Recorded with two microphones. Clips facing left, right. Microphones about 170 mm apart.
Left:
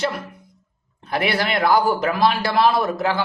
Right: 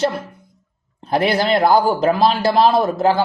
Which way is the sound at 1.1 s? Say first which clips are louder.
Right 5 dB; 35° right (ahead or behind).